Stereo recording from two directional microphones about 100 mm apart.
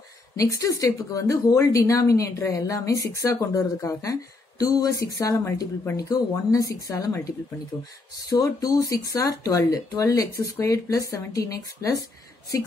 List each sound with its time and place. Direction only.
0.4 s a woman's voice: 35° left (ahead or behind)
8.3 s a woman's voice: 40° left (ahead or behind)